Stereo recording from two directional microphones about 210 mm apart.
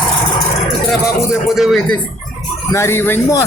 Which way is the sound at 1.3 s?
Centre (ahead or behind).